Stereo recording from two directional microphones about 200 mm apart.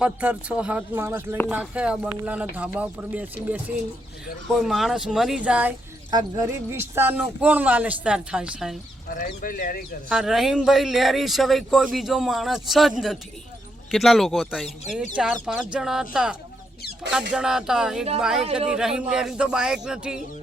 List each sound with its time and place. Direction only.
0.0 s speech: 5° right (ahead or behind)
6.1 s speech: 20° right (ahead or behind)
9.0 s speech: 45° left (ahead or behind)
10.1 s speech: centre (ahead or behind)